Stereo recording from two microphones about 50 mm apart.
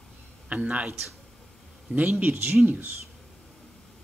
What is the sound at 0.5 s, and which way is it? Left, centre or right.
A man's voice, right.